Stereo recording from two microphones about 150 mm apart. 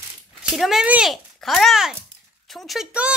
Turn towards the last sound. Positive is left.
turn(degrees=-5)  # may be behind; listen again after turning